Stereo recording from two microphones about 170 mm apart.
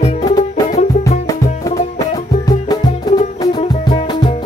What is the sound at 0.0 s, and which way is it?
Music, 25° left (ahead or behind).